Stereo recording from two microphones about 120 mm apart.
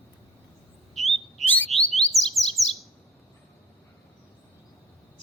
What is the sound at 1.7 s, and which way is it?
Alarm, centre (ahead or behind).